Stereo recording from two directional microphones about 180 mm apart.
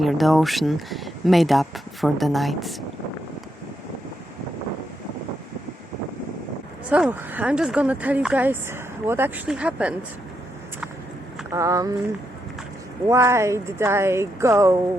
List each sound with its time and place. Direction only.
0.0 s speech: centre (ahead or behind)
6.9 s speech: 10° right (ahead or behind)
11.5 s speech: 15° right (ahead or behind)
13.1 s speech: 15° right (ahead or behind)